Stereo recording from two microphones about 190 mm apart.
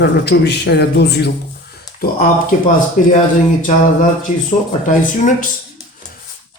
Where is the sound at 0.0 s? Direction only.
65° left (ahead or behind).